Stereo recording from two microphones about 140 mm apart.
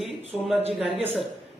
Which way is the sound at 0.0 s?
Centre (ahead or behind).